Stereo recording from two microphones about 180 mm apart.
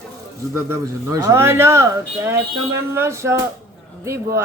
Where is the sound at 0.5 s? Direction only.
15° right (ahead or behind).